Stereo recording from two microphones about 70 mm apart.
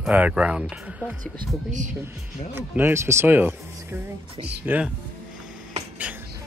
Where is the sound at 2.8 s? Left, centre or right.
Right.